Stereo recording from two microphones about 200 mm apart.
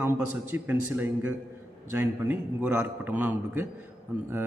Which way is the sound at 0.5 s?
10° right (ahead or behind).